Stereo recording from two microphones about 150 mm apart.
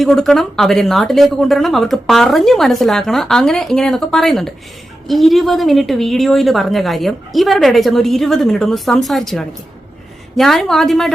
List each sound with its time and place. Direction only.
0.0 s speech: centre (ahead or behind)